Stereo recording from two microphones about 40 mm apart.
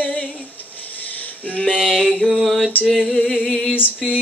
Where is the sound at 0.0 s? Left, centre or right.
Left.